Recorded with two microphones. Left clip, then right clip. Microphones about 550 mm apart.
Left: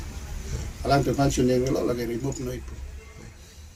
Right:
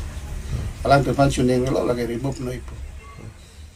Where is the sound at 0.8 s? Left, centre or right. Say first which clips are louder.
Right 6 dB; left.